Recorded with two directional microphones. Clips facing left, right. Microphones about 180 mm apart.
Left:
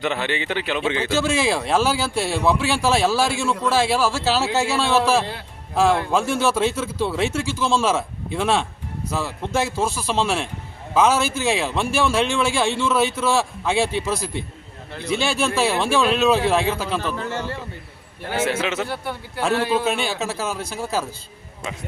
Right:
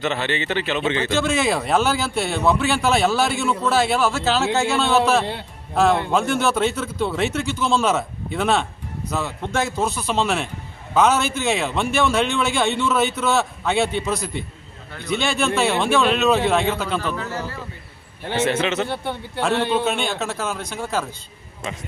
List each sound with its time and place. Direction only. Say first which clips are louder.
0.0 s speech: right 1 dB; 10° left (ahead or behind)
18.4 s speech: right 3 dB; 5° left (ahead or behind)